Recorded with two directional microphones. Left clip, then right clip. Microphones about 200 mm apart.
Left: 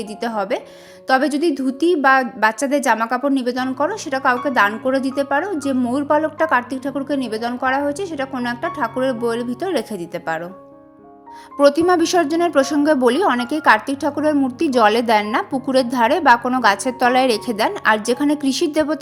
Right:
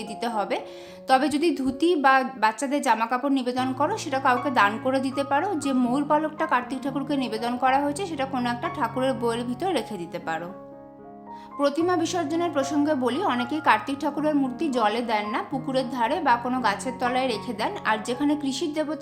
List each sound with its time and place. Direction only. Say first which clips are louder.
0.2 s a woman's voice: left 5 dB; 20° left (ahead or behind)
11.6 s a woman's voice: left 9 dB; 30° left (ahead or behind)